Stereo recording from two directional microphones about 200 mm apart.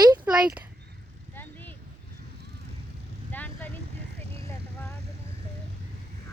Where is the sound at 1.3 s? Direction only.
10° left (ahead or behind).